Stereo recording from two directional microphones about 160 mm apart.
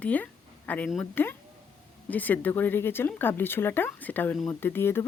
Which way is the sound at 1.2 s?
10° left (ahead or behind).